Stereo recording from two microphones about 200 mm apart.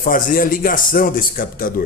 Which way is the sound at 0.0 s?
45° left (ahead or behind).